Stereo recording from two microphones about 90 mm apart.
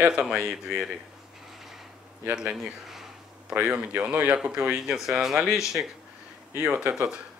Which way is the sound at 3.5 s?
15° right (ahead or behind).